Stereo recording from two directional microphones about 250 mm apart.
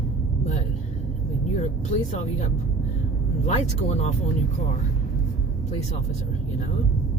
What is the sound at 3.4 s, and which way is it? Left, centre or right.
Speech, left.